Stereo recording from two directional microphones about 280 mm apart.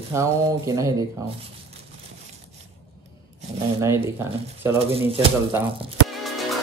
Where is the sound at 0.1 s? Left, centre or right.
Centre.